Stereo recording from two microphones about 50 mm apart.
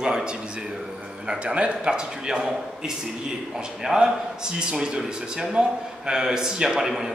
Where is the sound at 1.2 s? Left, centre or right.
Right.